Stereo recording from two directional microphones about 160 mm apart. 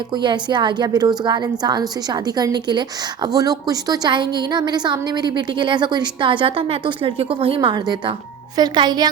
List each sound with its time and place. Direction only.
0.1 s a woman's voice: 30° right (ahead or behind)